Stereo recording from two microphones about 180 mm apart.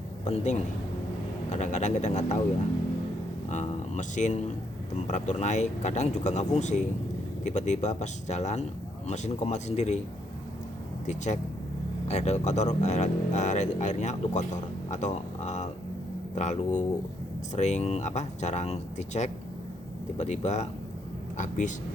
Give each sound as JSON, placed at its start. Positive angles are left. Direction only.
{"t": 0.3, "sound": "speech", "side_deg": 35}
{"t": 3.5, "sound": "speech", "side_deg": 40}
{"t": 11.0, "sound": "speech", "side_deg": 40}